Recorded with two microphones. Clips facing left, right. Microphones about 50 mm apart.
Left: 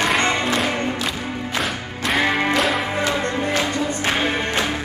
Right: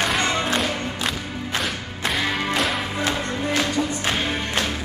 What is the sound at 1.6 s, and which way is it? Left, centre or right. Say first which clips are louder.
Music: left 1 dB; centre.